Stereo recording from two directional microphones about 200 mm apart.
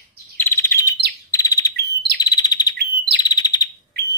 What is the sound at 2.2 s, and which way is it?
Chirp, 20° left (ahead or behind).